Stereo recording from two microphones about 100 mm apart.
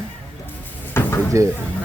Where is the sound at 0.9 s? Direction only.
20° left (ahead or behind).